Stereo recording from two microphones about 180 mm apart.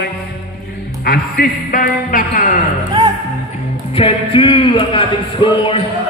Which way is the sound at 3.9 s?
30° left (ahead or behind).